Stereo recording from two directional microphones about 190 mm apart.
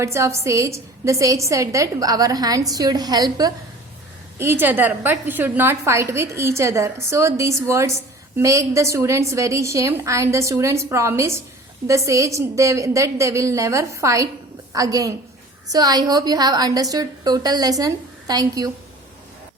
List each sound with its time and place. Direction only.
0.0 s a woman's voice: 15° right (ahead or behind)